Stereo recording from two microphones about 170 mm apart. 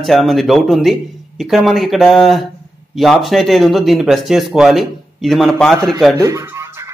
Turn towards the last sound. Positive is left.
turn(degrees=-20)  # may be behind; listen again after turning